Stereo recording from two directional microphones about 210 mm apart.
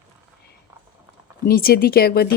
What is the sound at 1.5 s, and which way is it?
Speech, 45° left (ahead or behind).